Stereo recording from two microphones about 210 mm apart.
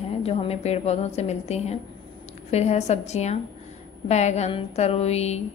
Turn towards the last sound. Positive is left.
turn(degrees=30)  # may be behind; listen again after turning